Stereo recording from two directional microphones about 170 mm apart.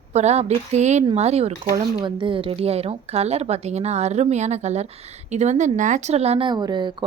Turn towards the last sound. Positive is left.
turn(degrees=-25)  # may be behind; listen again after turning